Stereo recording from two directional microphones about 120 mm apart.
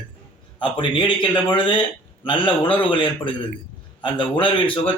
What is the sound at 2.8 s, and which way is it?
A man's voice, 45° left (ahead or behind).